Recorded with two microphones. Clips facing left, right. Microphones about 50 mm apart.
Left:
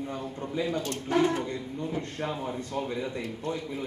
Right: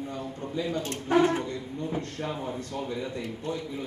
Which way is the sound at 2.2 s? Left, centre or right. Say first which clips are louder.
Even; centre.